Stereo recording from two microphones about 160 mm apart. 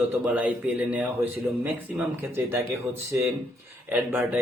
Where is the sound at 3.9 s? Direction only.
10° right (ahead or behind).